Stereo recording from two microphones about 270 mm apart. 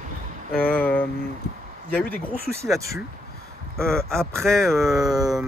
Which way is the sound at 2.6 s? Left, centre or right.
Centre.